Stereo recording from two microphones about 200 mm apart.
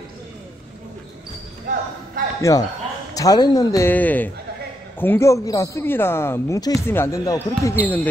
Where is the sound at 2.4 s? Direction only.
15° left (ahead or behind).